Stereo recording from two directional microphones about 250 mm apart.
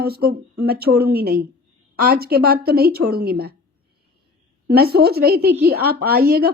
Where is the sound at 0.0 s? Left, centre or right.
Right.